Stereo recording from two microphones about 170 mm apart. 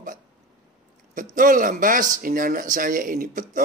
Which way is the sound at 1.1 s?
50° right (ahead or behind).